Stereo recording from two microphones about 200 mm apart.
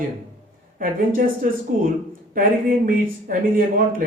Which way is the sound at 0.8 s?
45° right (ahead or behind).